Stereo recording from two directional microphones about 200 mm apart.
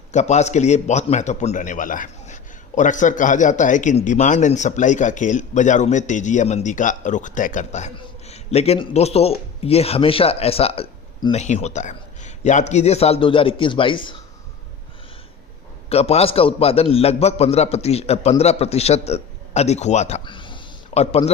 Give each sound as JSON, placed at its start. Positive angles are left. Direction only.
{"t": 0.1, "sound": "a man's voice", "side_deg": 35}
{"t": 15.9, "sound": "a man's voice", "side_deg": 30}